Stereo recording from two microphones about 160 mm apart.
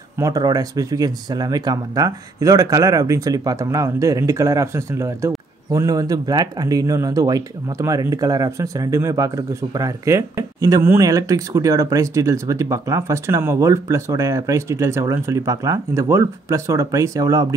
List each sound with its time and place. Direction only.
0.2 s speech: 25° right (ahead or behind)